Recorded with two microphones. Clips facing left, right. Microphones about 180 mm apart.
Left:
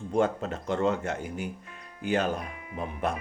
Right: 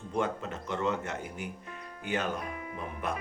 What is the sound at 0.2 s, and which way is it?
Speech, 35° left (ahead or behind).